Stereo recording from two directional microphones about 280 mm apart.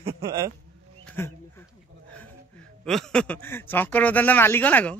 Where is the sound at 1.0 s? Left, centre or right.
Centre.